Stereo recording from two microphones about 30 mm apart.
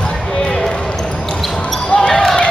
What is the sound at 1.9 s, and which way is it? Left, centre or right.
Basketball bounce, left.